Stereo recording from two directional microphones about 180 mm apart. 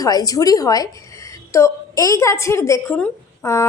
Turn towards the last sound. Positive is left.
turn(degrees=15)  # may be behind; listen again after turning